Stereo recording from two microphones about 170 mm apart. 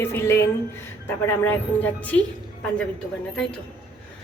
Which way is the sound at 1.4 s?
10° left (ahead or behind).